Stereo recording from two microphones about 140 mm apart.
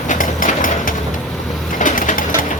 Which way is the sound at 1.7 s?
70° left (ahead or behind).